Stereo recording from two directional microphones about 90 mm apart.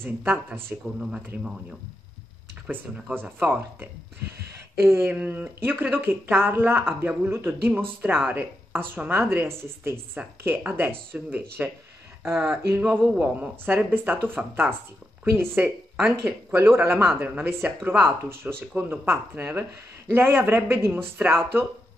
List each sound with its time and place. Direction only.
0.0 s a woman's voice: 20° right (ahead or behind)
0.9 s speech: 10° right (ahead or behind)
2.6 s a woman's voice: 15° right (ahead or behind)
12.7 s a woman's voice: 20° right (ahead or behind)